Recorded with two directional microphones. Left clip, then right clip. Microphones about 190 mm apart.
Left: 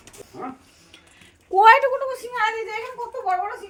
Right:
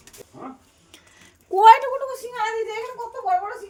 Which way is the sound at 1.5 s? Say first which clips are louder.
Right 1 dB; 40° right (ahead or behind).